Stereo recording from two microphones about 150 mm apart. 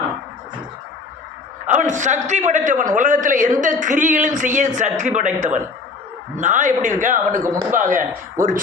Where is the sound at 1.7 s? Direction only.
55° right (ahead or behind).